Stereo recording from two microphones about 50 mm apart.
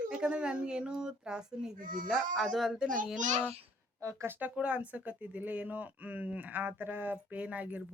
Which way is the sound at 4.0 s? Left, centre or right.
Right.